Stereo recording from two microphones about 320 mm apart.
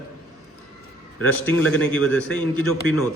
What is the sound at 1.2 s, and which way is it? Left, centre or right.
A man's voice, centre.